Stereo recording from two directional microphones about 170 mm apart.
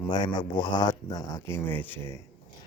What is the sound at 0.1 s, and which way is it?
Speech, 25° left (ahead or behind).